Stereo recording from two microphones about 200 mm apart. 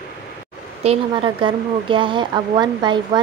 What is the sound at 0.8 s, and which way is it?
Speech, 25° right (ahead or behind).